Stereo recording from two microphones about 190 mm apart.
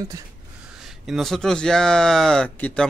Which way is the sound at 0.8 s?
Centre (ahead or behind).